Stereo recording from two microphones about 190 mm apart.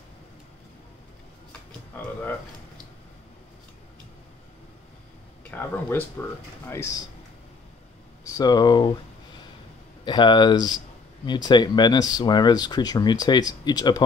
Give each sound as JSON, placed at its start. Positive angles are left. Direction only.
{"t": 5.4, "sound": "speech", "side_deg": 10}
{"t": 8.2, "sound": "speech", "side_deg": 20}
{"t": 10.0, "sound": "speech", "side_deg": 25}